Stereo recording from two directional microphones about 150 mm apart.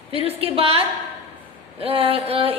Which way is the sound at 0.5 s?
40° right (ahead or behind).